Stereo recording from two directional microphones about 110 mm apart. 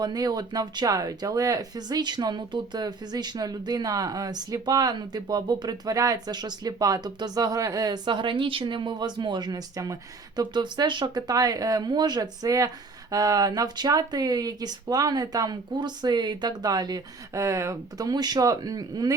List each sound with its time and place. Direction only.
0.0 s speech: 35° right (ahead or behind)